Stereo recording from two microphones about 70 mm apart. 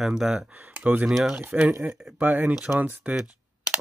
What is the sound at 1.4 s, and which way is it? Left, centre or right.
Speech, right.